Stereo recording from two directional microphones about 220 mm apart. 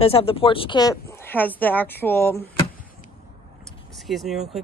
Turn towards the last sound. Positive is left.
turn(degrees=0)  # may be behind; listen again after turning